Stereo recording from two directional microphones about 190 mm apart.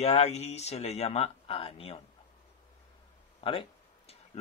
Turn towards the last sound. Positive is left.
turn(degrees=30)  # may be behind; listen again after turning